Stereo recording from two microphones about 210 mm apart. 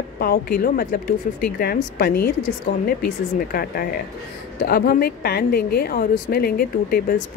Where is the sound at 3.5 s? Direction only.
45° left (ahead or behind).